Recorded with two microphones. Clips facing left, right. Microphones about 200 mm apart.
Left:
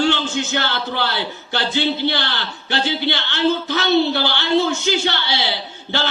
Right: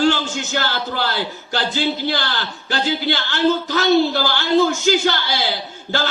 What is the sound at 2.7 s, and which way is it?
A man's voice, 45° right (ahead or behind).